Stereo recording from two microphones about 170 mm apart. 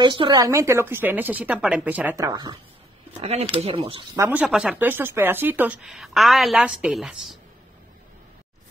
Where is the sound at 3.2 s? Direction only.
35° right (ahead or behind).